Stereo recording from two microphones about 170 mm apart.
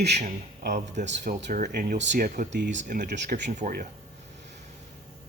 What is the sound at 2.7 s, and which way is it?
Speech, 50° right (ahead or behind).